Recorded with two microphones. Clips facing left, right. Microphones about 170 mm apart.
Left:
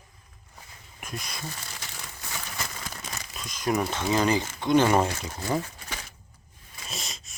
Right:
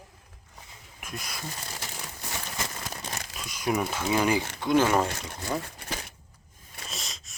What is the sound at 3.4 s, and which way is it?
Crumpling, 10° right (ahead or behind).